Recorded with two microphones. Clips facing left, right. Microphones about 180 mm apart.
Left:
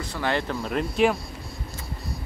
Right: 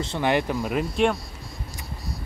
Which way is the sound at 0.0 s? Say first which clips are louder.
Right 4 dB; 20° right (ahead or behind).